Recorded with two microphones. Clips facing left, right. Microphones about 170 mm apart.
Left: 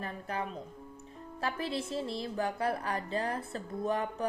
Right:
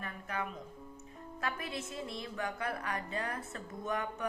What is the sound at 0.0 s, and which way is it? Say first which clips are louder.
Speech: left 3 dB; 30° left (ahead or behind).